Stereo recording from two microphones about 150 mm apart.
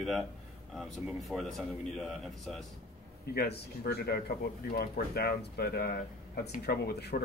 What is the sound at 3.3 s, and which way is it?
Speech, 90° left.